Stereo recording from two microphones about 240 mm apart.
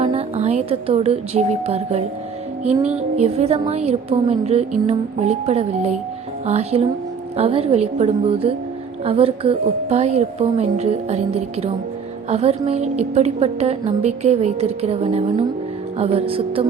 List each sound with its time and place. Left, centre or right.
0.0 s a woman's voice: right